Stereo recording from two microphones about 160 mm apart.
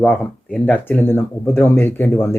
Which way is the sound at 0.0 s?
Centre (ahead or behind).